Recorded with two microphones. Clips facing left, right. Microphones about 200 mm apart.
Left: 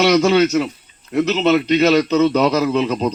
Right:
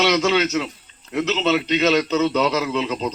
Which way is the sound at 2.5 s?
40° left (ahead or behind).